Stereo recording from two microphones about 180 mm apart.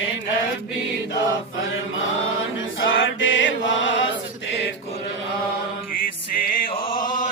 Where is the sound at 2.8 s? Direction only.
90° left.